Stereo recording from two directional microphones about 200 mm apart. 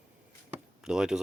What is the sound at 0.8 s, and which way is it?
Speech, 5° right (ahead or behind).